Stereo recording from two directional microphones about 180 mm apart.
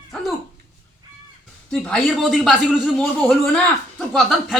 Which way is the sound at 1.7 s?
5° left (ahead or behind).